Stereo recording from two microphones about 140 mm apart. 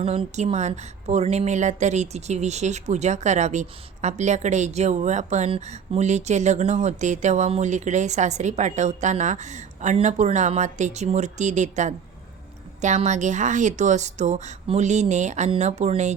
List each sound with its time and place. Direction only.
0.0 s a woman's voice: 50° right (ahead or behind)